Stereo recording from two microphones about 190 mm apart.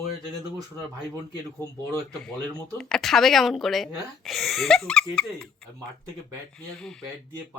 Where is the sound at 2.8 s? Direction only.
Centre (ahead or behind).